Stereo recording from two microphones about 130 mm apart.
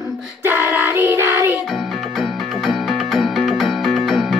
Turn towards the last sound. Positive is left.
turn(degrees=0)  # may be behind; listen again after turning